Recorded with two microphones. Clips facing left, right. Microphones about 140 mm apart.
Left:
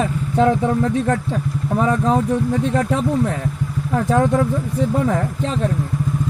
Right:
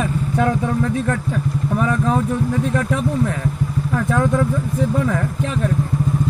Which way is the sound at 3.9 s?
35° left (ahead or behind).